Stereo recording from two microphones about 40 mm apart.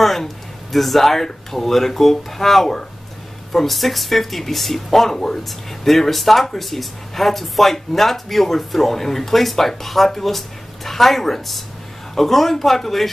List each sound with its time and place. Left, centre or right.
0.0 s speech: centre